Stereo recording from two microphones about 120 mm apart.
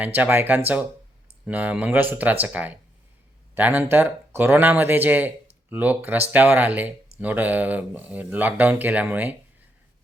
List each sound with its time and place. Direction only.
0.0 s speech: 15° right (ahead or behind)